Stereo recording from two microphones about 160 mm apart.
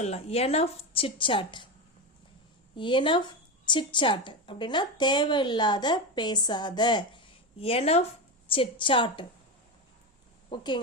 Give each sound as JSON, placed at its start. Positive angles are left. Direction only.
{"t": 0.0, "sound": "a woman's voice", "side_deg": 40}
{"t": 2.7, "sound": "a woman's voice", "side_deg": 30}
{"t": 10.5, "sound": "a woman's voice", "side_deg": 30}